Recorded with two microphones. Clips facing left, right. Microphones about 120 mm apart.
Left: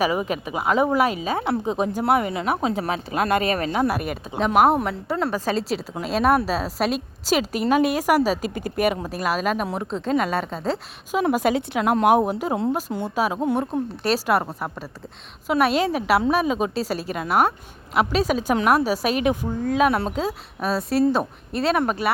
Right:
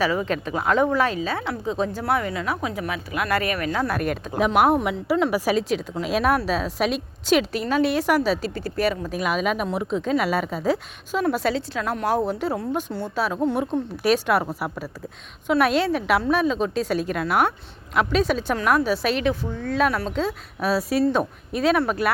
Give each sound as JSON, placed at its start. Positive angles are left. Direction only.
{"t": 0.0, "sound": "a woman's voice", "side_deg": 15}
{"t": 3.8, "sound": "a woman's voice", "side_deg": 10}
{"t": 9.0, "sound": "speech", "side_deg": 0}
{"t": 11.1, "sound": "a woman's voice", "side_deg": 10}
{"t": 14.0, "sound": "a woman's voice", "side_deg": 0}
{"t": 20.6, "sound": "speech", "side_deg": 0}